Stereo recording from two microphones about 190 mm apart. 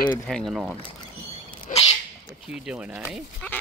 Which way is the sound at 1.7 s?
35° left (ahead or behind).